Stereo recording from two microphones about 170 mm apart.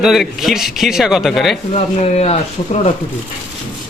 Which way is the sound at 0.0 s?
Centre (ahead or behind).